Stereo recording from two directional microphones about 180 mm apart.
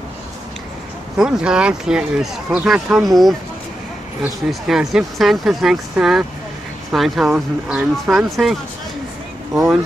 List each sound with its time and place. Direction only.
1.1 s speech: 5° right (ahead or behind)